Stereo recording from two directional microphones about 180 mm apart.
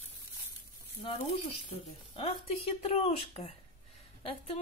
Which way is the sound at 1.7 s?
30° left (ahead or behind).